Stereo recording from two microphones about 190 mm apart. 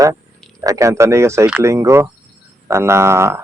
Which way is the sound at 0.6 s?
15° right (ahead or behind).